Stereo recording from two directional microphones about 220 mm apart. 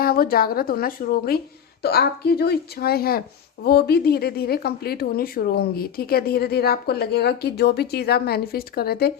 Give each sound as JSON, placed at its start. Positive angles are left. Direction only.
{"t": 0.0, "sound": "speech", "side_deg": 40}